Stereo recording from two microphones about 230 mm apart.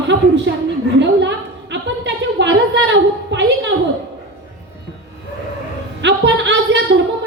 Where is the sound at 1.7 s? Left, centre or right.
Right.